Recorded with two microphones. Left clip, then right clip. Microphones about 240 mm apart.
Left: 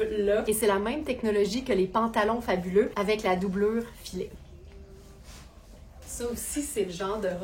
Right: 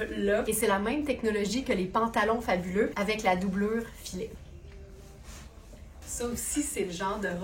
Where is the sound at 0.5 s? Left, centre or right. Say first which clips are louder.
Left 2 dB; left.